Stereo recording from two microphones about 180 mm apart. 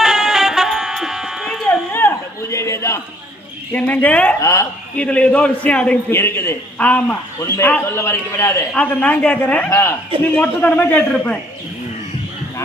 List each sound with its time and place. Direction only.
0.0 s music: centre (ahead or behind)
1.9 s a sound: 10° left (ahead or behind)
3.7 s a man's voice: 10° left (ahead or behind)